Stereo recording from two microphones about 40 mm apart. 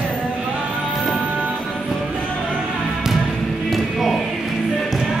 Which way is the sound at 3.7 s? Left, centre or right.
Centre.